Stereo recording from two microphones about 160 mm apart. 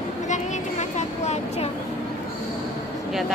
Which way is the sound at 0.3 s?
45° left (ahead or behind).